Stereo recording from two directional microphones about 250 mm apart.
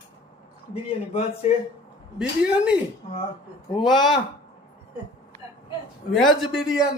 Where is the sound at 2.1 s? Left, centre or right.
Centre.